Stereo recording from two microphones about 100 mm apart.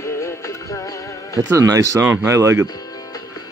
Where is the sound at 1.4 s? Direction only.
35° right (ahead or behind).